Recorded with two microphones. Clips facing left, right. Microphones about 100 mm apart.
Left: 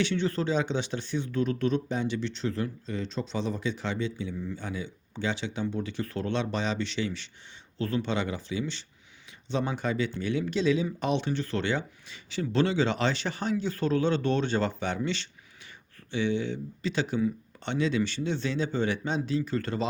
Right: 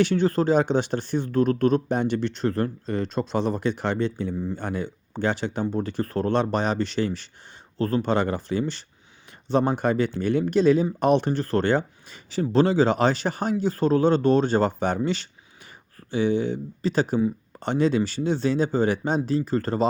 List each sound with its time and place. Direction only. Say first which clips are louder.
0.0 s speech: right 7 dB; 45° right (ahead or behind)